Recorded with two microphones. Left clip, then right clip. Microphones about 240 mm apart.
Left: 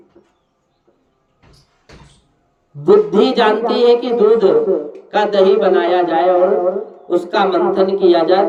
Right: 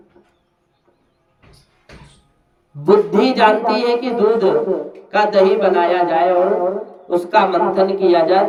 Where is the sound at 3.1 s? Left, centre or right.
Centre.